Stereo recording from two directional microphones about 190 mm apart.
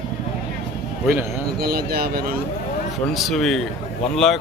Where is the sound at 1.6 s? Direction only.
55° right (ahead or behind).